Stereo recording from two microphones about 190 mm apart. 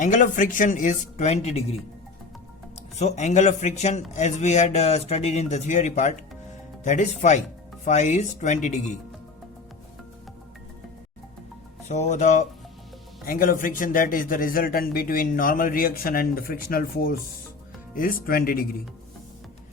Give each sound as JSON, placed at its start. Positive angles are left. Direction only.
{"t": 0.0, "sound": "speech", "side_deg": 40}
{"t": 3.0, "sound": "speech", "side_deg": 35}
{"t": 11.9, "sound": "a man's voice", "side_deg": 40}